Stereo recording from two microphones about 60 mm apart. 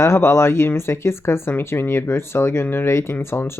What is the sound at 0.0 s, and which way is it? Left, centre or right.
Speech, left.